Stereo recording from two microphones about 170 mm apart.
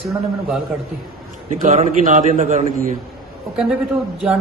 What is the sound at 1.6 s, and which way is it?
A man's voice, 50° right (ahead or behind).